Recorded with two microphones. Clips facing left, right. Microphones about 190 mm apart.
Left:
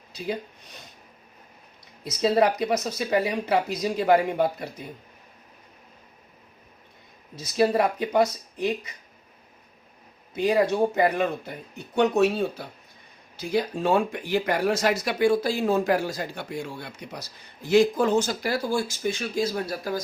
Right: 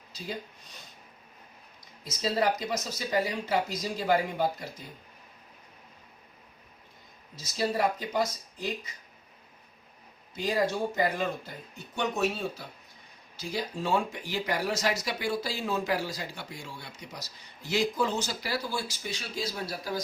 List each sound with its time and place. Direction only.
2.0 s speech: 65° left (ahead or behind)
7.3 s speech: 60° left (ahead or behind)
10.3 s speech: 60° left (ahead or behind)